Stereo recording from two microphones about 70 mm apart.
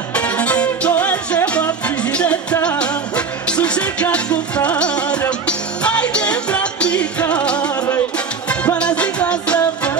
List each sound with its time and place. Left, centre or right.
0.1 s music: centre
2.8 s music: centre